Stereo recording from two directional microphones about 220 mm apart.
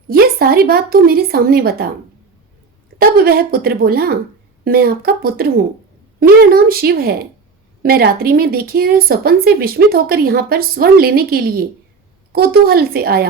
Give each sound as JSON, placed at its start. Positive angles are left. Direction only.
{"t": 0.1, "sound": "speech", "side_deg": -45}
{"t": 3.0, "sound": "speech", "side_deg": -45}